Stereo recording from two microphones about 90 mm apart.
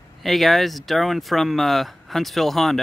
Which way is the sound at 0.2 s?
Centre (ahead or behind).